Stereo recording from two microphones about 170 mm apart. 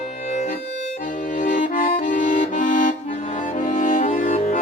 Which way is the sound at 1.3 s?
50° left (ahead or behind).